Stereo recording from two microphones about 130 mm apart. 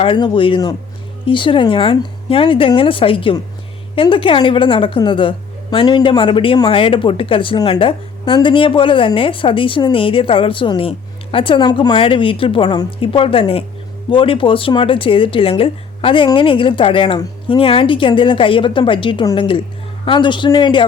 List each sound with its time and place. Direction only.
0.0 s speech: 40° left (ahead or behind)
13.0 s speech: 45° left (ahead or behind)